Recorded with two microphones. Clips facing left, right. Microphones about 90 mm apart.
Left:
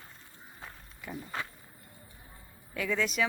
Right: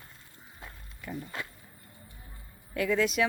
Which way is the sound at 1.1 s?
10° left (ahead or behind).